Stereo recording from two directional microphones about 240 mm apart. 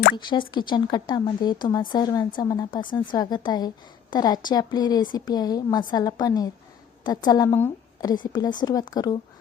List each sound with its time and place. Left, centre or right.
0.3 s speech: centre